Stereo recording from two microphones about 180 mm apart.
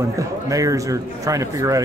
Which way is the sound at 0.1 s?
20° right (ahead or behind).